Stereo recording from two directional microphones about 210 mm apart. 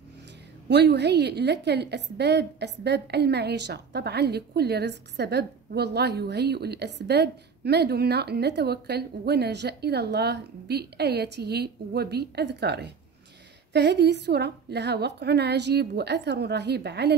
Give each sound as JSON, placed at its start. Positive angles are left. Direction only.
{"t": 0.7, "sound": "a woman's voice", "side_deg": -55}